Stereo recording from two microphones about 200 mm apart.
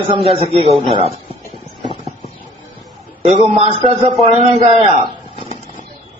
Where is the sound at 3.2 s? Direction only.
30° right (ahead or behind).